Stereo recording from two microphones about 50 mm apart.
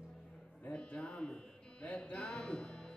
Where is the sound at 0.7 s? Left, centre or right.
Centre.